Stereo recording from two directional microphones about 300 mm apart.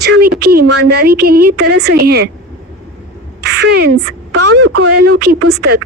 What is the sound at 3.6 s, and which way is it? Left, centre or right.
Speech, right.